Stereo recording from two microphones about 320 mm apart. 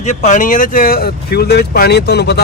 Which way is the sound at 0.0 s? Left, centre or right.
Left.